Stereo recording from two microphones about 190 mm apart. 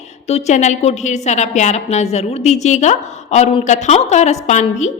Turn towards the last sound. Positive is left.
turn(degrees=40)  # may be behind; listen again after turning